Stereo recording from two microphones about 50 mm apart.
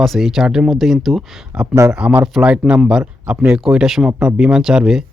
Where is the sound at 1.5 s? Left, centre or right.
Centre.